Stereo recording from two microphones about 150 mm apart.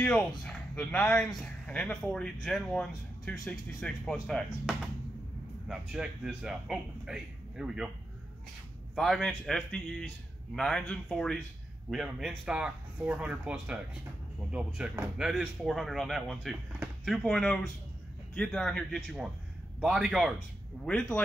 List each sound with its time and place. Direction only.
0.4 s speech: 5° left (ahead or behind)
5.7 s speech: 5° right (ahead or behind)
8.9 s speech: centre (ahead or behind)